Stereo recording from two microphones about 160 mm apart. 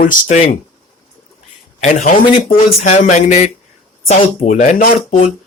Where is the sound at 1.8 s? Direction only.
50° left (ahead or behind).